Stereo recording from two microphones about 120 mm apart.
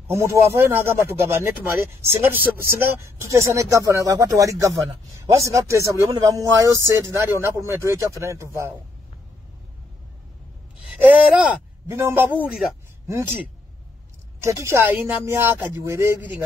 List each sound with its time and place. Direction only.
0.1 s speech: 20° right (ahead or behind)
11.2 s speech: 10° right (ahead or behind)
11.9 s speech: 25° right (ahead or behind)
14.4 s speech: 25° right (ahead or behind)